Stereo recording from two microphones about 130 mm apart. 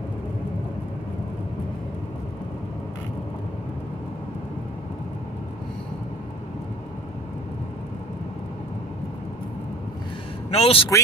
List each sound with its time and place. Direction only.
10.5 s a man's voice: 50° left (ahead or behind)